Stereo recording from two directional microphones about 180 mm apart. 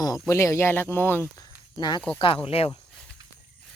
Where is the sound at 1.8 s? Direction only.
25° left (ahead or behind).